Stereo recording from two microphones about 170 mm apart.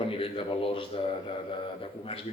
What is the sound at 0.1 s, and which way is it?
Speech, 30° left (ahead or behind).